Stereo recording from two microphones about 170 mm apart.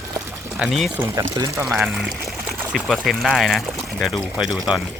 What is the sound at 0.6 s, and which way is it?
Speech, 5° right (ahead or behind).